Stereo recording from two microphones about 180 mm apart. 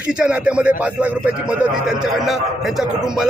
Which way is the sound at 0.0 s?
5° right (ahead or behind).